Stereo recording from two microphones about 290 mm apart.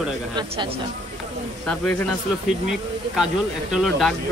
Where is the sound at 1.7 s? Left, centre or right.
Centre.